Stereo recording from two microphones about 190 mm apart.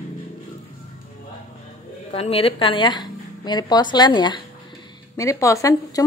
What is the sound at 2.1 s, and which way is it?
Speech, 30° left (ahead or behind).